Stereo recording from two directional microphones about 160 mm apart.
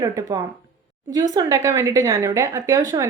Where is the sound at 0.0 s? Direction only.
20° right (ahead or behind).